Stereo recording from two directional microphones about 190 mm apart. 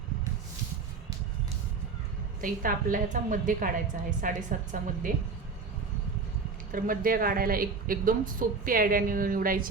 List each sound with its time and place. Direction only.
2.4 s a woman's voice: 45° right (ahead or behind)
6.7 s a woman's voice: 45° right (ahead or behind)